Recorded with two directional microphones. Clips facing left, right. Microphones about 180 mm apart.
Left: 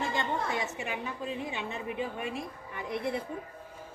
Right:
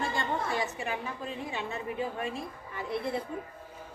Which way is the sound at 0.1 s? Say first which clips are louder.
Even; 20° left (ahead or behind).